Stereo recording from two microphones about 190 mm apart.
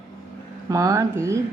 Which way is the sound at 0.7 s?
15° right (ahead or behind).